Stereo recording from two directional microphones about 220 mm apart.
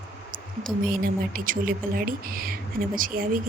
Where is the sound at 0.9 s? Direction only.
40° right (ahead or behind).